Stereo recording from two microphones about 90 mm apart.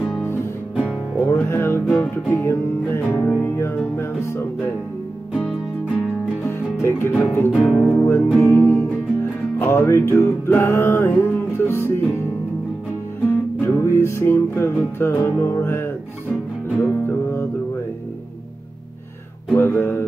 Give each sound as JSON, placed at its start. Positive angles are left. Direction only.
{"t": 0.2, "sound": "music", "side_deg": 30}
{"t": 6.4, "sound": "music", "side_deg": 30}
{"t": 7.6, "sound": "music", "side_deg": 0}
{"t": 8.0, "sound": "music", "side_deg": 30}
{"t": 13.3, "sound": "music", "side_deg": 25}
{"t": 19.5, "sound": "music", "side_deg": 25}